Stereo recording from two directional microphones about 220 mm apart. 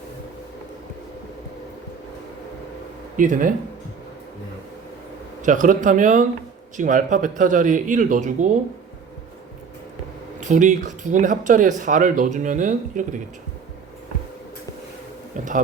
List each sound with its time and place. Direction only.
3.2 s speech: 35° right (ahead or behind)
5.4 s speech: 35° right (ahead or behind)
10.4 s speech: 35° right (ahead or behind)